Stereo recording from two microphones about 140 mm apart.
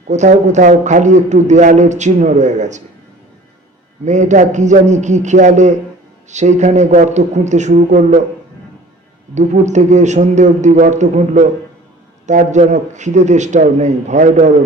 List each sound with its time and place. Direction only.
0.1 s a man's voice: 55° right (ahead or behind)
4.0 s a man's voice: 60° right (ahead or behind)
9.3 s a man's voice: 55° right (ahead or behind)